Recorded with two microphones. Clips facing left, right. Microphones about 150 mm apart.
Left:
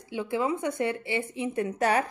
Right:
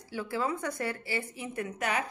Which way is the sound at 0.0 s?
20° left (ahead or behind).